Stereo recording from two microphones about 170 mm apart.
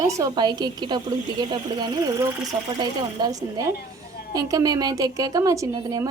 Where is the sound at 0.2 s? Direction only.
25° right (ahead or behind).